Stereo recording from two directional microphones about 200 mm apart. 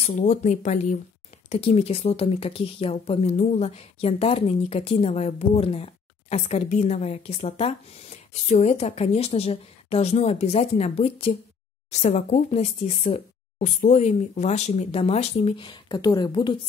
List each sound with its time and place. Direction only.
0.0 s speech: 35° left (ahead or behind); by 16.5 s 20° left (ahead or behind)